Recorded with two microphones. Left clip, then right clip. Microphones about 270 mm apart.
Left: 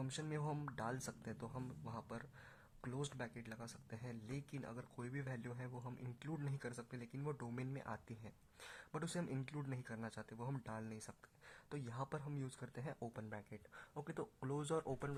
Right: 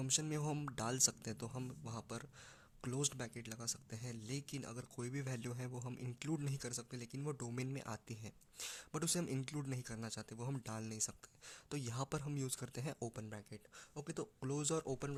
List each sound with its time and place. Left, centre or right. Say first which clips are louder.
0.0 s speech: right 5 dB; right